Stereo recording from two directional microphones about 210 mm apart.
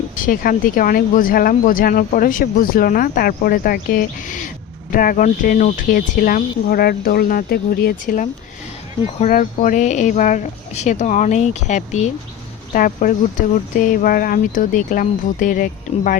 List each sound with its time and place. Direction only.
0.2 s speech: 40° left (ahead or behind)